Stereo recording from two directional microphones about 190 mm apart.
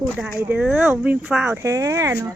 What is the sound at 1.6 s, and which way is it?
Speech, 15° right (ahead or behind).